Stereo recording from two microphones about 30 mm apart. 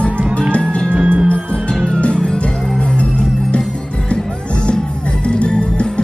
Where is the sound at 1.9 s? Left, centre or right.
Left.